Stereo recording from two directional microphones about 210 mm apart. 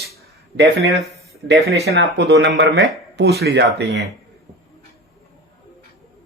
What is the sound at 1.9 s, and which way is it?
A man's voice, 55° right (ahead or behind).